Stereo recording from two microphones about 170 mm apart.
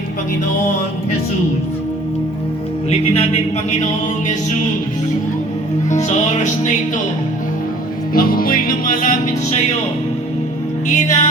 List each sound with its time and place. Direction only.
2.9 s music: 35° left (ahead or behind)
5.9 s music: 45° left (ahead or behind)
8.1 s music: 60° left (ahead or behind)
10.8 s music: 45° left (ahead or behind)